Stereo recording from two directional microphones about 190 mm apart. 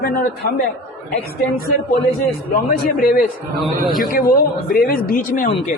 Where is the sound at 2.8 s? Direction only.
50° left (ahead or behind).